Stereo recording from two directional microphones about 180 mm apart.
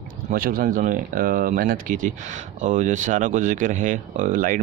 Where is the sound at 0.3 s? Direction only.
50° right (ahead or behind).